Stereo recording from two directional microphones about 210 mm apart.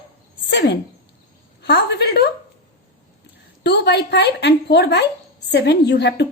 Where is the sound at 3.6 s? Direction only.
55° left (ahead or behind).